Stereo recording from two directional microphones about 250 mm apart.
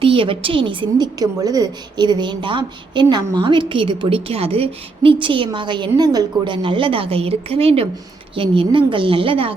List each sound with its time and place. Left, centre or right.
0.0 s a woman's voice: right